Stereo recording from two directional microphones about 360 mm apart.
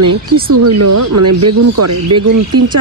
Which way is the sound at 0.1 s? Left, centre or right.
Right.